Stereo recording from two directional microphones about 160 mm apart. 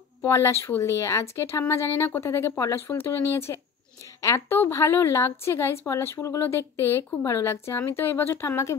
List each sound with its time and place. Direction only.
0.2 s a woman's voice: 15° left (ahead or behind)